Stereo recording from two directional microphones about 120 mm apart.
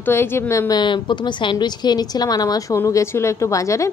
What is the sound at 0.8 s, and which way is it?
A woman's voice, 40° left (ahead or behind).